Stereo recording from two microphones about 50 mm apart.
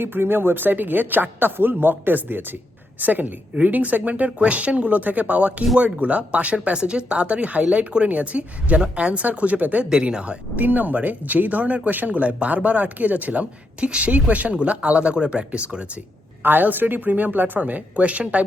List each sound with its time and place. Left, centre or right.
0.0 s speech: right
4.3 s speech: right
9.9 s speech: centre
10.5 s speech: right
16.4 s speech: right